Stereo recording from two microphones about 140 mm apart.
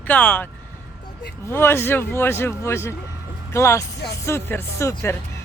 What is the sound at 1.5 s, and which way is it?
A man's voice, 15° left (ahead or behind).